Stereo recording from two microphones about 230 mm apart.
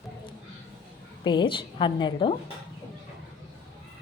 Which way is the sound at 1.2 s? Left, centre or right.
Centre.